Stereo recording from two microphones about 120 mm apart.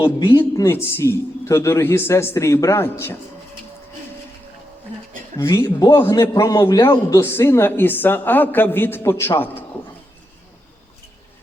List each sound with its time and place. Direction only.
0.0 s a man's voice: 40° left (ahead or behind); by 3.2 s 20° left (ahead or behind)
5.4 s a man's voice: 25° left (ahead or behind)